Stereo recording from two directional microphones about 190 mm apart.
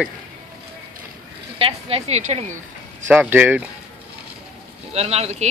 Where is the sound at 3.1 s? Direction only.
10° right (ahead or behind).